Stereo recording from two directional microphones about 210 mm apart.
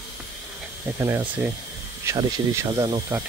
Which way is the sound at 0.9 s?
10° right (ahead or behind).